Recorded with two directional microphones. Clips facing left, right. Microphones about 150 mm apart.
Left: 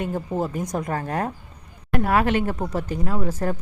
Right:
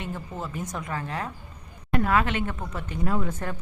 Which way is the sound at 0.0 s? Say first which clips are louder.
Left 9 dB; 40° left (ahead or behind).